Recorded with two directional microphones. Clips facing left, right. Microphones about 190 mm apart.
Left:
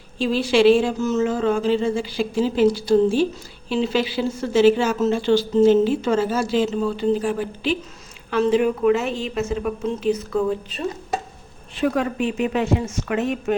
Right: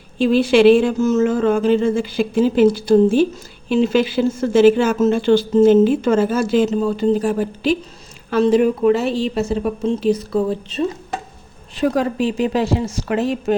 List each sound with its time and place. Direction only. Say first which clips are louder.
0.2 s a woman's voice: right 5 dB; 55° right (ahead or behind); by 13.6 s 35° right (ahead or behind)